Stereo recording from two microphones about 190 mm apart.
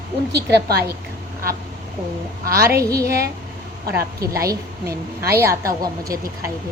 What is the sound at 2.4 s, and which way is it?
Speech, 50° right (ahead or behind).